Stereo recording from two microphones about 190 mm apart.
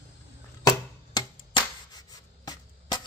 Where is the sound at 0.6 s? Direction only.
20° left (ahead or behind).